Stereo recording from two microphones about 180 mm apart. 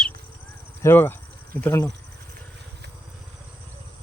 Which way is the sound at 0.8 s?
10° left (ahead or behind).